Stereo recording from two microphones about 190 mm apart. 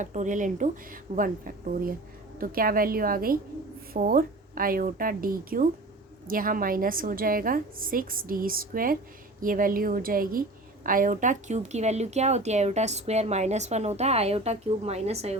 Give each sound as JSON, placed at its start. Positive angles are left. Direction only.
{"t": 0.0, "sound": "a woman's voice", "side_deg": -40}